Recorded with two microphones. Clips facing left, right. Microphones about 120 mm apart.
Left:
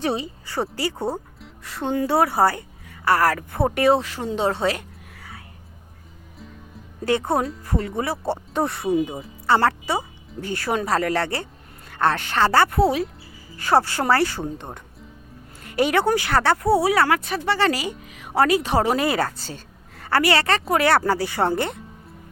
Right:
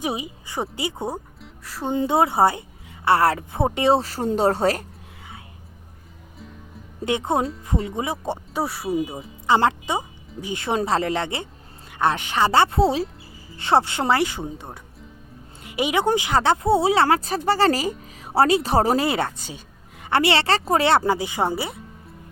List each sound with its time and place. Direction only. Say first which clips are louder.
0.0 s a woman's voice: left 3 dB; 10° right (ahead or behind)
1.4 s music: left 1 dB; centre (ahead or behind)
1.9 s a woman's voice: even; 20° right (ahead or behind); by 4.9 s 40° right (ahead or behind)
7.0 s a woman's voice: left 1 dB; 20° right (ahead or behind)
8.3 s speech: left 2 dB; 5° right (ahead or behind)
9.5 s a woman's voice: even; 20° right (ahead or behind)
19.4 s a woman's voice: left 1 dB; 15° right (ahead or behind)